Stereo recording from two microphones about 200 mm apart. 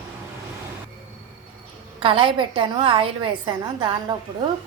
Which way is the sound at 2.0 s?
25° right (ahead or behind).